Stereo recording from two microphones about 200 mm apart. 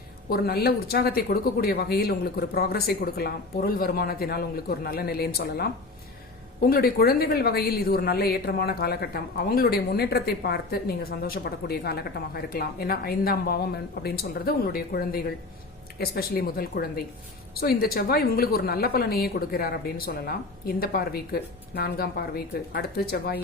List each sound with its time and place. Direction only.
0.3 s a woman's voice: 50° left (ahead or behind)